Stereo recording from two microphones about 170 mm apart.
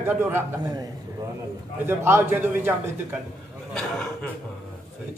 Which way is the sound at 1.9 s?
15° right (ahead or behind).